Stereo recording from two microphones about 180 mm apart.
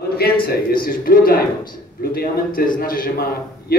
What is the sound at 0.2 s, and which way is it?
A man's voice, 60° left (ahead or behind).